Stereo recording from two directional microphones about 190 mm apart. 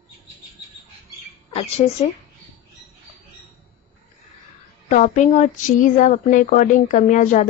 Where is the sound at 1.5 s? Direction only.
35° left (ahead or behind).